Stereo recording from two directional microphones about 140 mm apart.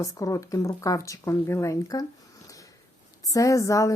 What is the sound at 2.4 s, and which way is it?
Sniff, 25° left (ahead or behind).